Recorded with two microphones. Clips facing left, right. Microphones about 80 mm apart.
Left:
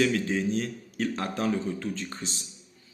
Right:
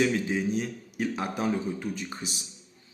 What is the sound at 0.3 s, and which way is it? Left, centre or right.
A man's voice, centre.